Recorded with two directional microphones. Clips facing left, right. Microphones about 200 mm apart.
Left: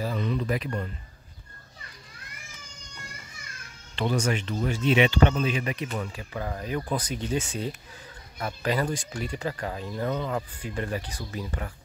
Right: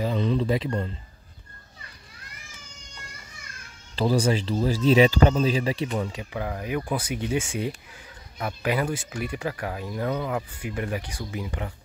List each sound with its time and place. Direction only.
0.0 s speech: 25° right (ahead or behind)
3.9 s speech: 35° right (ahead or behind); by 11.7 s 15° right (ahead or behind)